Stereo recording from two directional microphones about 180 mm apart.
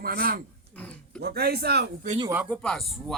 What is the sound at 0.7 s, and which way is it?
Speech, 5° left (ahead or behind).